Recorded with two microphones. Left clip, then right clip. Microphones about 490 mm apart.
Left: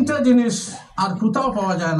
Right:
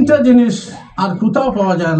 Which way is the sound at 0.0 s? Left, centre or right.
Left.